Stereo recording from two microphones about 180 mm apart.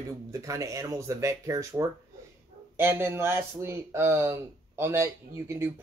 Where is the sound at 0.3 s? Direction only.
15° right (ahead or behind).